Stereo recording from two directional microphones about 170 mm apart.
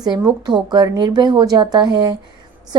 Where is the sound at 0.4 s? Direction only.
25° right (ahead or behind).